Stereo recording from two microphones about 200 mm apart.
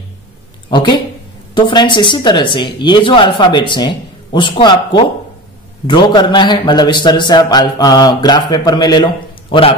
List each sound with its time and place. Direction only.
0.7 s a man's voice: 25° left (ahead or behind)